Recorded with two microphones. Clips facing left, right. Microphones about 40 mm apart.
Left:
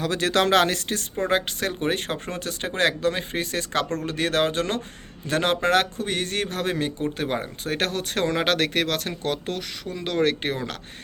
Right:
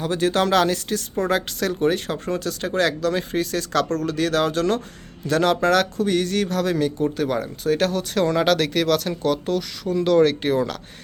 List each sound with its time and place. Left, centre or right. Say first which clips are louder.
0.0 s speech: right 1 dB; left
1.1 s speech: right 1 dB; left
10.0 s speech: right 6 dB; left